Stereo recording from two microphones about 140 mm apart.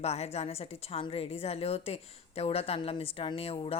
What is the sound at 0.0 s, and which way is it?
A woman's voice, 50° left (ahead or behind).